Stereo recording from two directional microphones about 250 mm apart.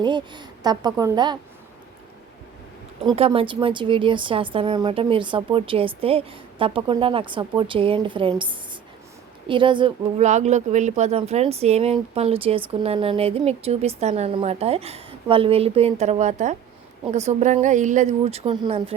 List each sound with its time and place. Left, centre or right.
0.0 s speech: centre
3.0 s speech: right